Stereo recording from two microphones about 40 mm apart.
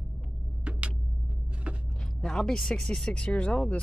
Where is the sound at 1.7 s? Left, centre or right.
Right.